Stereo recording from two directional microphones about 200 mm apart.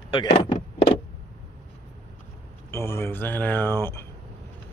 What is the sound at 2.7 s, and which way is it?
Speech, 10° left (ahead or behind).